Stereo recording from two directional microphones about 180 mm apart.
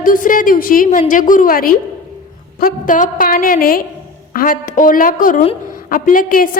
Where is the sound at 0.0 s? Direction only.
50° left (ahead or behind).